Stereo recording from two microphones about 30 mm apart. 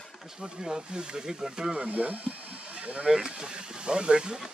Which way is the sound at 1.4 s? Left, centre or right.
Centre.